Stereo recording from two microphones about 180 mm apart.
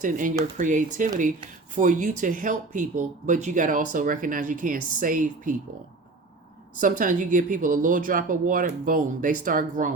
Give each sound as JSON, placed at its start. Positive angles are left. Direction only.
{"t": 0.0, "sound": "speech", "side_deg": -45}
{"t": 6.7, "sound": "speech", "side_deg": -50}